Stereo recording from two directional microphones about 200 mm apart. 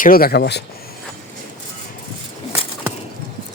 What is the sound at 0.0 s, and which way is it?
Speech, 45° left (ahead or behind).